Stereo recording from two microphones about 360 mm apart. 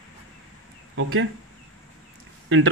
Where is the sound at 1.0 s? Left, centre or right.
Right.